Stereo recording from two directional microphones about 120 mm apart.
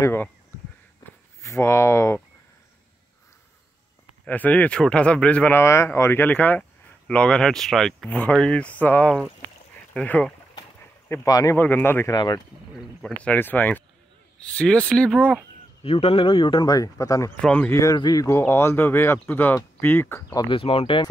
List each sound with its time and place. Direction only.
0.0 s speech: 20° left (ahead or behind)
1.4 s speech: 25° left (ahead or behind)
4.2 s speech: 15° left (ahead or behind)
5.6 s speech: 25° left (ahead or behind)
11.2 s speech: 30° left (ahead or behind)
11.5 s speech: 15° left (ahead or behind)
12.1 s speech: 35° left (ahead or behind)
13.2 s speech: 15° left (ahead or behind)
15.8 s a man's voice: 50° left (ahead or behind); by 17.3 s 30° left (ahead or behind)
17.4 s speech: 10° left (ahead or behind)
17.9 s speech: 35° left (ahead or behind); by 20.3 s 20° left (ahead or behind)
20.3 s a man's voice: 45° left (ahead or behind)